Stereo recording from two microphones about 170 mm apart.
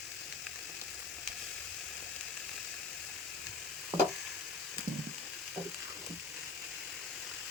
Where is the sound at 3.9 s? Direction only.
15° right (ahead or behind).